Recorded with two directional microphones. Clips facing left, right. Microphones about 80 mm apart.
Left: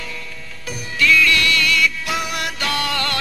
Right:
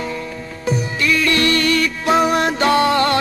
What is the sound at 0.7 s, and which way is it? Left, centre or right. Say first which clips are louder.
Music: right 1 dB; right.